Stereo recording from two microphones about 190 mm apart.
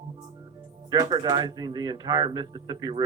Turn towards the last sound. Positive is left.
turn(degrees=-20)  # may be behind; listen again after turning